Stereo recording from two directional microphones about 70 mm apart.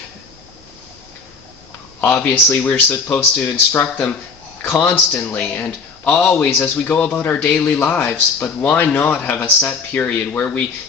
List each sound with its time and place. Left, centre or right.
2.0 s speech: left
6.9 s speech: centre
7.2 s speech: left
7.5 s speech: centre